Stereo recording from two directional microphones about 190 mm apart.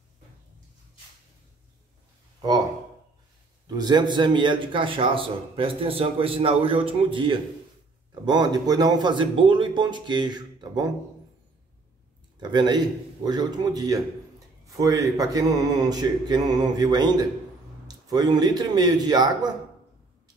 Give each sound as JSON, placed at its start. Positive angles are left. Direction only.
{"t": 3.6, "sound": "a man's voice", "side_deg": -20}
{"t": 12.4, "sound": "a man's voice", "side_deg": -25}